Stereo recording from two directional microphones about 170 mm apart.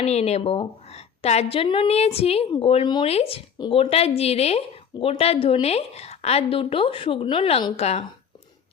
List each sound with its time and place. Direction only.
0.0 s a woman's voice: 40° left (ahead or behind)